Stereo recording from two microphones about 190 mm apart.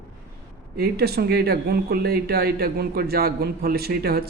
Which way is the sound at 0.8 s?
55° right (ahead or behind).